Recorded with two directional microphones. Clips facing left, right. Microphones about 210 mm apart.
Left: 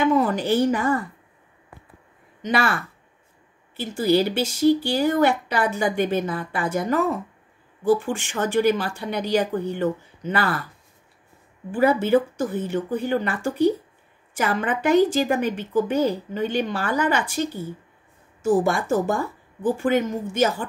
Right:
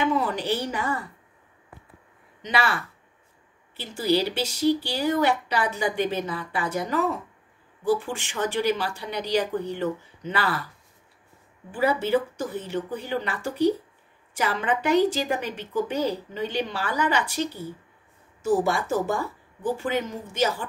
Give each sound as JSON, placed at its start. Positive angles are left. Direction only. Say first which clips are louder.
{"t": 0.0, "sound": "a woman's voice", "louder": "left 5 dB", "side_deg": 45}
{"t": 2.4, "sound": "a woman's voice", "louder": "left 3 dB", "side_deg": 50}
{"t": 11.7, "sound": "a woman's voice", "louder": "left 5 dB", "side_deg": 50}
{"t": 18.4, "sound": "a woman's voice", "louder": "left 3 dB", "side_deg": 50}